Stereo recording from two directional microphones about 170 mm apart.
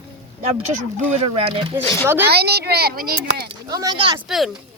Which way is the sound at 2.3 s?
70° right (ahead or behind).